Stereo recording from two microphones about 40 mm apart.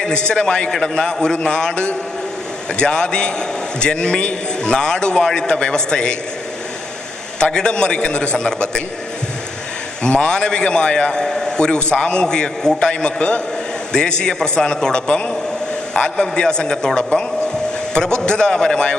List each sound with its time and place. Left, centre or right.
0.0 s a man's voice: left
0.7 s a man's voice: centre
7.5 s a man's voice: left
10.0 s a man's voice: left
18.2 s a man's voice: centre